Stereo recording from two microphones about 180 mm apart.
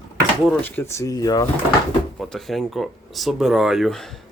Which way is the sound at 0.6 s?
15° left (ahead or behind).